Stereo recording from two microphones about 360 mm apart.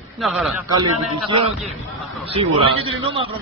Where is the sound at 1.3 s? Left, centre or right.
Centre.